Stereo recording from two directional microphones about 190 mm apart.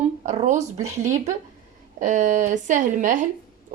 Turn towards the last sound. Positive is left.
turn(degrees=-40)  # may be behind; listen again after turning